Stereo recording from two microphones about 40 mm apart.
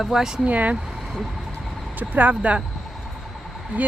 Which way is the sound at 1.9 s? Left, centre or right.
Right.